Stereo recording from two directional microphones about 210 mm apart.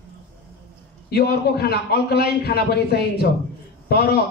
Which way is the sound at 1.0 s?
50° left (ahead or behind).